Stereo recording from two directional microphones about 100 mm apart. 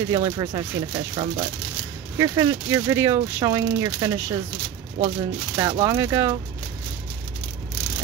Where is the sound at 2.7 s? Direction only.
30° right (ahead or behind).